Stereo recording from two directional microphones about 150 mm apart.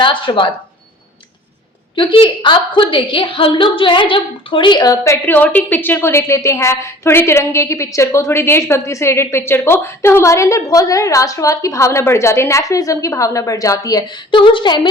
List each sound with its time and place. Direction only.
0.0 s speech: 35° left (ahead or behind)
2.0 s a woman's voice: 35° left (ahead or behind)